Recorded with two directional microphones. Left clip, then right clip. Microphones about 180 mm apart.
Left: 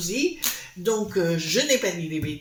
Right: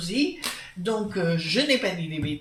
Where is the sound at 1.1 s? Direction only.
35° left (ahead or behind).